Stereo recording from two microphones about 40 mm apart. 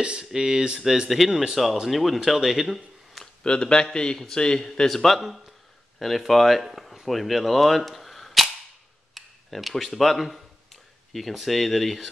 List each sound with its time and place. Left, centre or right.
0.0 s speech: right
0.3 s speech: centre
1.3 s speech: centre
1.9 s speech: centre
3.4 s a man's voice: left; by 12.1 s centre